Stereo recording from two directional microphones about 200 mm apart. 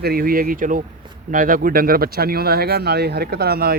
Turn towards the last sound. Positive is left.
turn(degrees=-50)  # may be behind; listen again after turning